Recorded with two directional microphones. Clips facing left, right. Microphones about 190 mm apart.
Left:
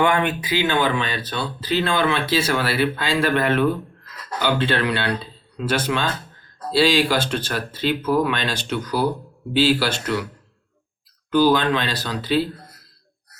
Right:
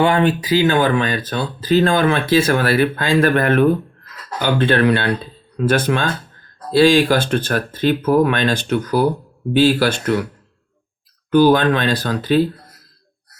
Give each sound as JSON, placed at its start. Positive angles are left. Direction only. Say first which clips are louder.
{"t": 0.0, "sound": "speech", "louder": "right 4 dB", "side_deg": -30}
{"t": 11.3, "sound": "speech", "louder": "right 5 dB", "side_deg": -55}